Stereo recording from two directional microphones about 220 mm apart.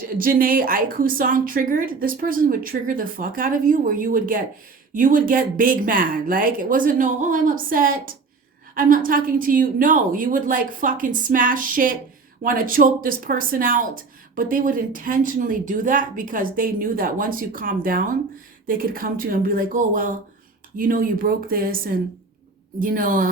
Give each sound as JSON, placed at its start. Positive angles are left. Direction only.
{"t": 0.2, "sound": "speech", "side_deg": -40}